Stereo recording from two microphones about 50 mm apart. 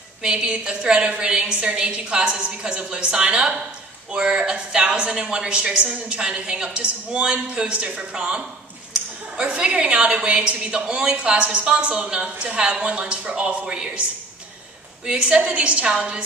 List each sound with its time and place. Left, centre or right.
0.2 s a woman's voice: right
15.0 s a woman's voice: centre